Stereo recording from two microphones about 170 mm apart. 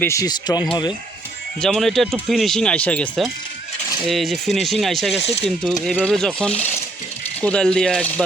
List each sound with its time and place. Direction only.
0.0 s speech: 20° left (ahead or behind)
1.6 s speech: centre (ahead or behind)